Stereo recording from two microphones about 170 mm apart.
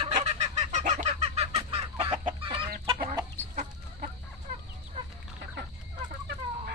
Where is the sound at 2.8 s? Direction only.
20° right (ahead or behind).